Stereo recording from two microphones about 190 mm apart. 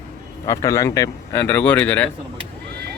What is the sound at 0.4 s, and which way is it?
Speech, 15° left (ahead or behind).